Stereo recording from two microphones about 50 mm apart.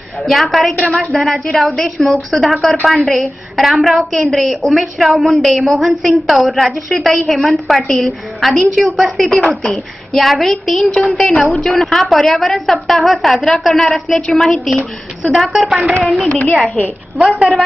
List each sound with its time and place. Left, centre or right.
0.2 s a woman's voice: centre
15.6 s a woman's voice: right
16.0 s a woman's voice: centre
16.3 s a child's voice: left
17.2 s speech: centre